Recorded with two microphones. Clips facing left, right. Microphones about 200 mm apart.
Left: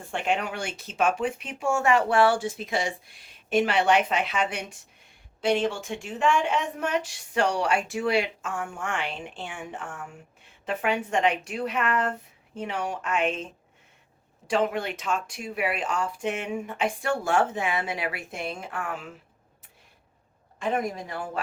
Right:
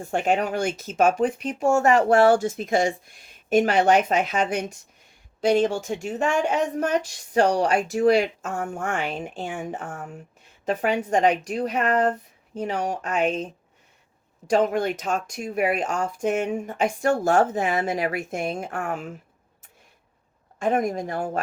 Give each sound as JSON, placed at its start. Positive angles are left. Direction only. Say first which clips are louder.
{"t": 0.0, "sound": "speech", "louder": "right 5 dB", "side_deg": -45}
{"t": 20.6, "sound": "speech", "louder": "right 5 dB", "side_deg": -45}